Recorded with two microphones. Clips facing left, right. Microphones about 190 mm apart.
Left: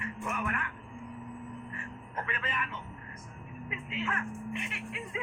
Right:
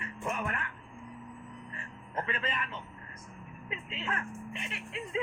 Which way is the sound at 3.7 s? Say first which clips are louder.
Left 2 dB; 30° right (ahead or behind).